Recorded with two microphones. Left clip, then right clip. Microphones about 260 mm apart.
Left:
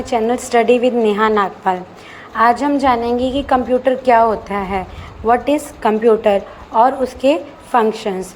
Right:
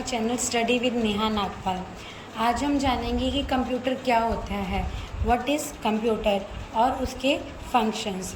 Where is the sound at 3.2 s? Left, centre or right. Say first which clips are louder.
Left 10 dB; left.